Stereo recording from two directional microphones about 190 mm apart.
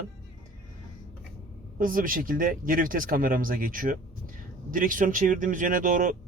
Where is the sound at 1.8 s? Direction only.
45° right (ahead or behind).